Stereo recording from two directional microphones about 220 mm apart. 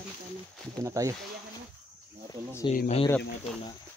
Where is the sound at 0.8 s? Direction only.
15° right (ahead or behind).